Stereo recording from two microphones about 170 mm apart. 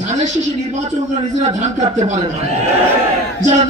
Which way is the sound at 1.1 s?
40° right (ahead or behind).